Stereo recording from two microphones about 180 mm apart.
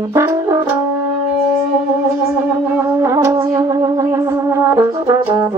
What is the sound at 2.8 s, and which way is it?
Music, 15° right (ahead or behind).